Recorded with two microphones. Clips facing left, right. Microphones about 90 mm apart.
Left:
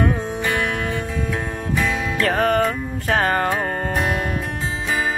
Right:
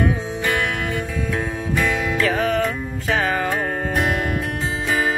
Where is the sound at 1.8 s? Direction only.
Centre (ahead or behind).